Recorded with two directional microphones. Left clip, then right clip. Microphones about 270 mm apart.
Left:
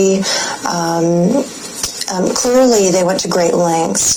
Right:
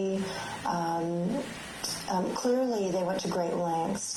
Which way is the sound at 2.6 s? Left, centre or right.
Left.